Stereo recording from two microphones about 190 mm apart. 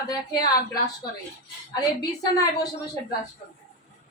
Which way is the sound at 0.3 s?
20° left (ahead or behind).